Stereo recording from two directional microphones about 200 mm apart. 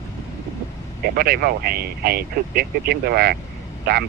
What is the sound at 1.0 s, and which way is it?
Speech, 50° right (ahead or behind).